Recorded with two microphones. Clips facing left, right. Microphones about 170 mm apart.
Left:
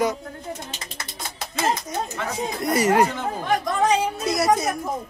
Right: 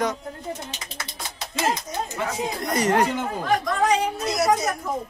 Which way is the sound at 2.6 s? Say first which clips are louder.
Left 3 dB; 10° left (ahead or behind).